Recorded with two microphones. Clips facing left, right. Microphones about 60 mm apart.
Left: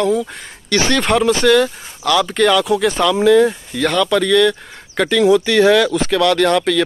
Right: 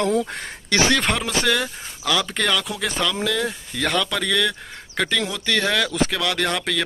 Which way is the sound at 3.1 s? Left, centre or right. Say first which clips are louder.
Left 13 dB; left.